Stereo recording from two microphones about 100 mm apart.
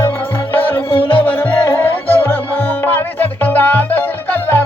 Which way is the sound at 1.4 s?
20° left (ahead or behind).